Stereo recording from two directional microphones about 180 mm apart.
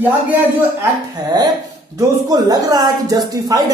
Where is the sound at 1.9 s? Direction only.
20° right (ahead or behind).